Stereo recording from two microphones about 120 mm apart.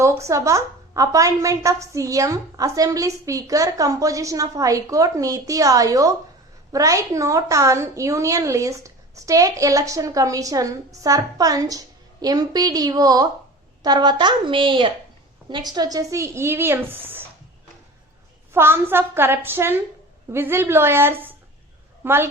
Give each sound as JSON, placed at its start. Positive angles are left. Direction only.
{"t": 0.0, "sound": "a woman's voice", "side_deg": -25}
{"t": 18.5, "sound": "a woman's voice", "side_deg": -20}